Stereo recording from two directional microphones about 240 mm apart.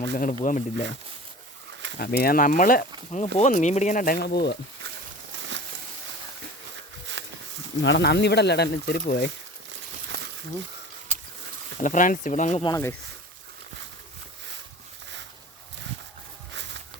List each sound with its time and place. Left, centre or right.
0.1 s speech: left
2.0 s speech: left
5.4 s a sound: right
7.2 s a sound: right
7.8 s speech: left
11.8 s speech: left
12.6 s speech: centre